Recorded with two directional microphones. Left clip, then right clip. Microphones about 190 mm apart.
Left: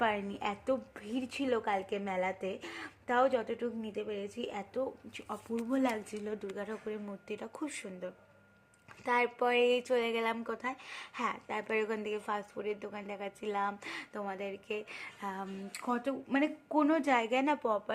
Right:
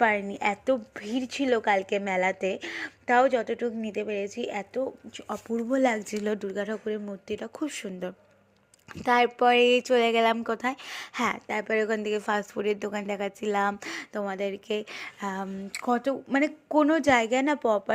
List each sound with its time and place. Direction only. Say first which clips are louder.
0.0 s a woman's voice: right 9 dB; 25° right (ahead or behind)
5.6 s speech: right 9 dB; 35° right (ahead or behind)
6.5 s a woman's voice: right 9 dB; 30° right (ahead or behind)